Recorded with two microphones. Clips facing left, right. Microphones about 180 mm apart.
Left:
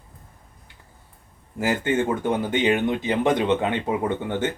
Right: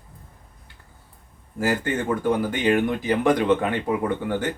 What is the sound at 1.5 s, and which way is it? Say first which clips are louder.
Speech: left 1 dB; 20° left (ahead or behind).